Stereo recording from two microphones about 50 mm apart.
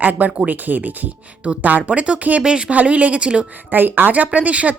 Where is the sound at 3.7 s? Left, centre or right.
Right.